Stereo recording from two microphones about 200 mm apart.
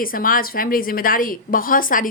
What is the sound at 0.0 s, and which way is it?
A woman's voice, 45° left (ahead or behind).